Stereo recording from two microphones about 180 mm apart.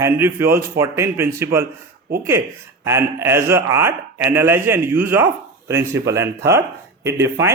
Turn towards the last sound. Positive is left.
turn(degrees=-15)  # may be behind; listen again after turning